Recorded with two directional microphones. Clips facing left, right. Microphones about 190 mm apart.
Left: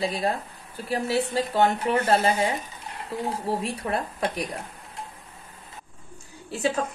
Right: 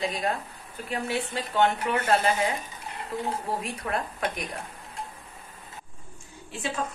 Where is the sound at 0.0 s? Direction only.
35° left (ahead or behind).